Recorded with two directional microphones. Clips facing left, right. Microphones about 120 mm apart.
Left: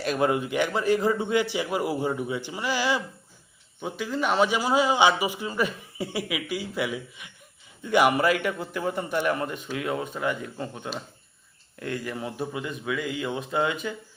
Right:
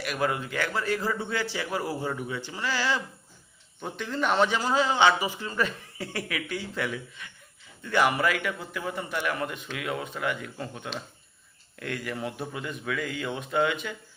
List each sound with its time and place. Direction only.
0.0 s a man's voice: 25° left (ahead or behind)
8.2 s a man's voice: 30° left (ahead or behind)